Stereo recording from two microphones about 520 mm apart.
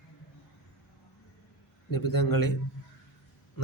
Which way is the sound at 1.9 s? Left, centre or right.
Left.